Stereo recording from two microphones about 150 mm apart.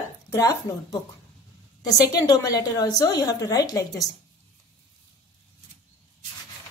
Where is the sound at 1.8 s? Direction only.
25° left (ahead or behind).